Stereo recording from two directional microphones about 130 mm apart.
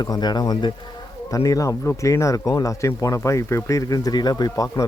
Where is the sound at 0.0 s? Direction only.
30° left (ahead or behind).